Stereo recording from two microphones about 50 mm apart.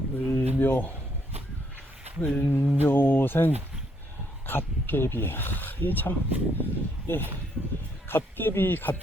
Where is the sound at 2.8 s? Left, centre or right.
Left.